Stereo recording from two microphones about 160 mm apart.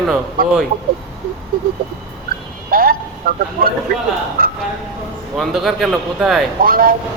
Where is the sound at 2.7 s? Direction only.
65° right (ahead or behind).